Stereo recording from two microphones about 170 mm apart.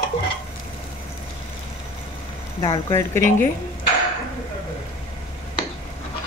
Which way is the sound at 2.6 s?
25° left (ahead or behind).